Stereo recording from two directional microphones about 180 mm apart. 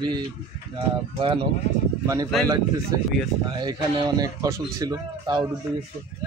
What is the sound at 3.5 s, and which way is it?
Speech, 25° right (ahead or behind).